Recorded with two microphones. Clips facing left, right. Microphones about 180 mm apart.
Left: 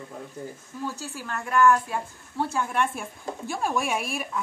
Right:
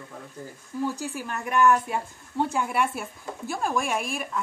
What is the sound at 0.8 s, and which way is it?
A woman's voice, 15° right (ahead or behind).